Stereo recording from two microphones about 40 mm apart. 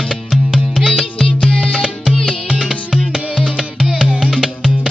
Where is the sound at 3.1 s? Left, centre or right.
Right.